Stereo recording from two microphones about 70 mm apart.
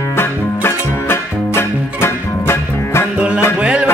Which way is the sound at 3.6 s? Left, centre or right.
Centre.